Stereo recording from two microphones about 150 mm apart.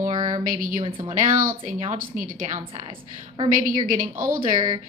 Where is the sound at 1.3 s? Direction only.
65° right (ahead or behind).